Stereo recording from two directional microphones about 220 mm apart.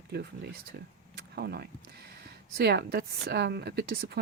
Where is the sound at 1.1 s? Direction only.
45° right (ahead or behind).